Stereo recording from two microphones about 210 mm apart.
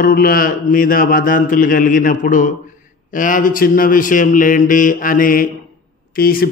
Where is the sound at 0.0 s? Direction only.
45° left (ahead or behind).